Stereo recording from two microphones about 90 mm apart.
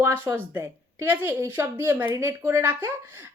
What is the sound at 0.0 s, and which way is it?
Speech, 25° right (ahead or behind).